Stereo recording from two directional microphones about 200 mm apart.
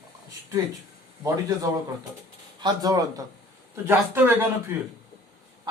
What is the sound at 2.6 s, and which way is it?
Speech, 20° right (ahead or behind).